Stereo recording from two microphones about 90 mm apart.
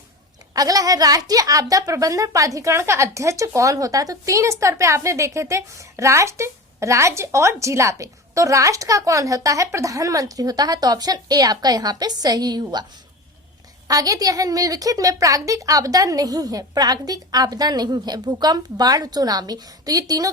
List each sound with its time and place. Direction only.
0.5 s a woman's voice: 40° right (ahead or behind)
13.8 s a woman's voice: 40° right (ahead or behind)